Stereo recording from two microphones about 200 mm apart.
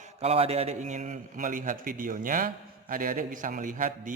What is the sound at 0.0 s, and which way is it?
A man's voice, 30° right (ahead or behind).